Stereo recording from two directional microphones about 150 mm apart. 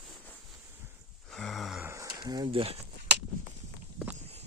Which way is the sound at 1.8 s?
15° right (ahead or behind).